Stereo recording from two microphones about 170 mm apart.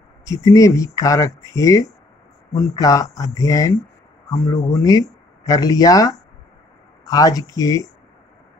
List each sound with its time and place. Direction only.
0.2 s speech: 20° left (ahead or behind)